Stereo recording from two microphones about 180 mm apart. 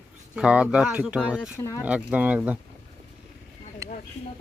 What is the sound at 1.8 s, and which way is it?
Speech, 10° right (ahead or behind).